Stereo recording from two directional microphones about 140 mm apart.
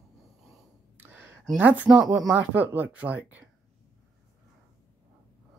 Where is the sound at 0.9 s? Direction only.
15° right (ahead or behind).